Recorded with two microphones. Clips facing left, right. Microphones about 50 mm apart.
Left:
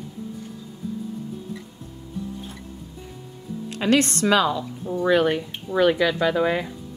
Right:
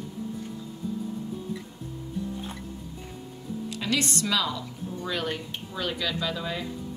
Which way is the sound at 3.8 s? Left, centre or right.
Left.